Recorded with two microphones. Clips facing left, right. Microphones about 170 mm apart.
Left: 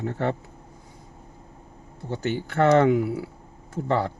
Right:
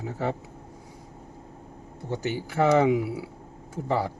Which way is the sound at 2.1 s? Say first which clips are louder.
Left 2 dB; 10° right (ahead or behind).